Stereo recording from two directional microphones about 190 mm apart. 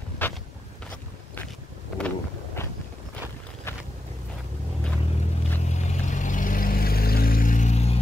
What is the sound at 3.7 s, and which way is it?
Boat, 15° left (ahead or behind).